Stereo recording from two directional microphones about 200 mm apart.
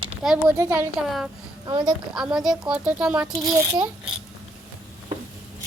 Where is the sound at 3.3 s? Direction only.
20° right (ahead or behind).